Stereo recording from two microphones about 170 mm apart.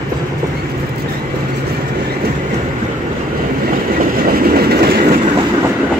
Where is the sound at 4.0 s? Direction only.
60° right (ahead or behind).